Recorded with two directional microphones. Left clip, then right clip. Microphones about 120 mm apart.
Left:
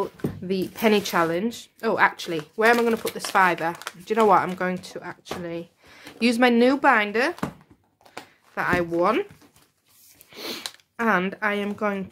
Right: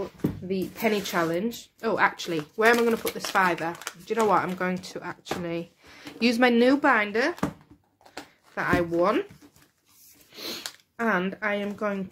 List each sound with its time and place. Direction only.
0.7 s speech: 50° left (ahead or behind)
4.4 s speech: 15° left (ahead or behind); by 5.9 s centre (ahead or behind)
5.9 s speech: 10° left (ahead or behind)
8.1 s a sound: 20° left (ahead or behind)
9.0 s speech: 25° left (ahead or behind)
10.3 s sniff: 40° left (ahead or behind)
11.0 s speech: 30° left (ahead or behind)